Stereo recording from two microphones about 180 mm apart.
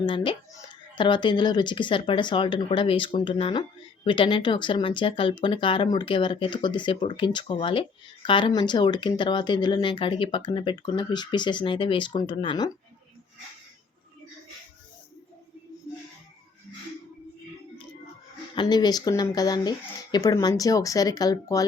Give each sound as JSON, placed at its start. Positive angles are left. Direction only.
{"t": 0.0, "sound": "speech", "side_deg": 25}
{"t": 18.5, "sound": "speech", "side_deg": 25}